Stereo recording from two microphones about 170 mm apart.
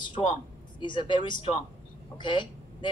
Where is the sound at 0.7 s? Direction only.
25° left (ahead or behind).